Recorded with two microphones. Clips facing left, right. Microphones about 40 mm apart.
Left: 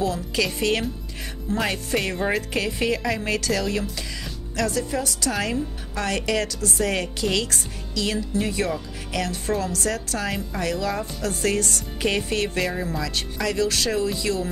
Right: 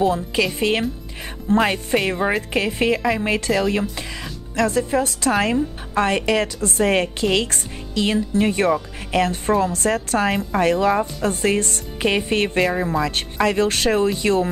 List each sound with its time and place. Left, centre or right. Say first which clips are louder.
0.0 s a woman's voice: right 5 dB; right